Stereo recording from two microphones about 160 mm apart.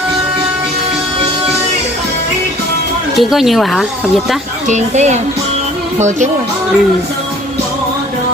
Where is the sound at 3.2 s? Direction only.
Centre (ahead or behind).